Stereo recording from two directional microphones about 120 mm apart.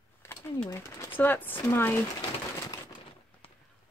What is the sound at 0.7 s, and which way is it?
Speech, 25° left (ahead or behind).